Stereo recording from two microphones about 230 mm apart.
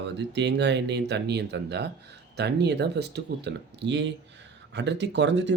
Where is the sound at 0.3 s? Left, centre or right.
Right.